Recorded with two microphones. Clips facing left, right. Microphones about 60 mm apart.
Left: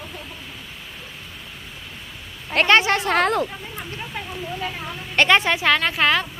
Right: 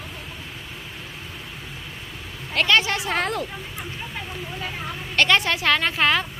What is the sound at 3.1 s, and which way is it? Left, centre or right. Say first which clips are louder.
Speech: left 6 dB; left.